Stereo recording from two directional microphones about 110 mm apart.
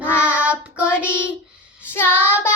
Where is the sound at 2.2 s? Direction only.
20° left (ahead or behind).